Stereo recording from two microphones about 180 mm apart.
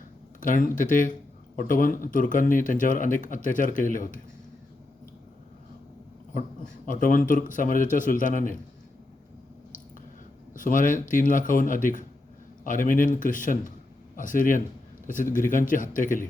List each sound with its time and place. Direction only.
0.3 s speech: 50° left (ahead or behind)
6.8 s speech: 50° left (ahead or behind)
10.5 s speech: 50° left (ahead or behind)